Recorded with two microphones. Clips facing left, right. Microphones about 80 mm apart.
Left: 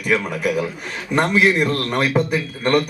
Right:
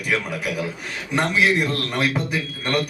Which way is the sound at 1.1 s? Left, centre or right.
Left.